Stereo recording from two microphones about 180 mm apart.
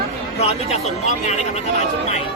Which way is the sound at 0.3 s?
35° left (ahead or behind).